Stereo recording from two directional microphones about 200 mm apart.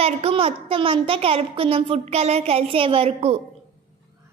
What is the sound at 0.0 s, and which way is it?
A child's voice, 30° right (ahead or behind).